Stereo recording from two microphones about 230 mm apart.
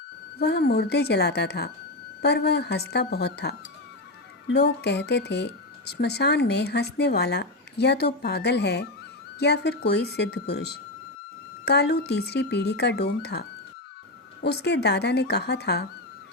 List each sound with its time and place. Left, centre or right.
0.3 s speech: left
4.5 s speech: left
11.6 s speech: left
14.4 s speech: left